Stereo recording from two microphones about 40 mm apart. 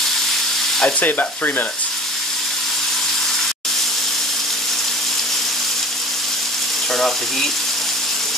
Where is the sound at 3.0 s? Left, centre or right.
Centre.